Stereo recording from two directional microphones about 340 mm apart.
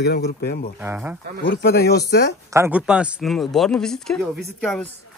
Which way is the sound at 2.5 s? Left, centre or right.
Centre.